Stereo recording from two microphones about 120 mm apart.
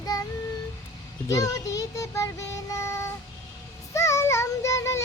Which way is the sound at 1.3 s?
25° left (ahead or behind).